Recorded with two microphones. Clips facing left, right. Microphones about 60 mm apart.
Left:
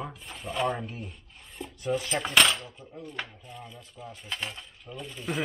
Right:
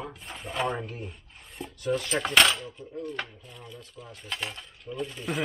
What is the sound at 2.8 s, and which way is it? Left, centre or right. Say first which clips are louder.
Cutlery: right 4 dB; centre.